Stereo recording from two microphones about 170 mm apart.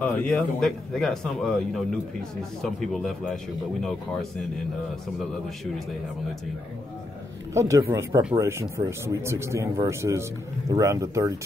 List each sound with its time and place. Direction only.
0.0 s speech: 5° left (ahead or behind)
7.5 s speech: 20° right (ahead or behind)